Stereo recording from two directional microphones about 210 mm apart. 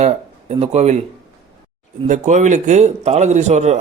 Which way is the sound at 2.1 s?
35° right (ahead or behind).